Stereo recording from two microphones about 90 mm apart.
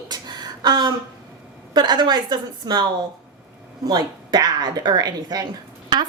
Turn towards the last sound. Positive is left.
turn(degrees=-50)  # may be behind; listen again after turning